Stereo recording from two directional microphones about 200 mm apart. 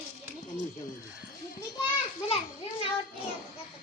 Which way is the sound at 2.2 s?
30° left (ahead or behind).